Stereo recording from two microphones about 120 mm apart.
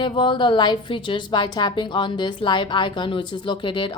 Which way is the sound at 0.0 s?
40° left (ahead or behind).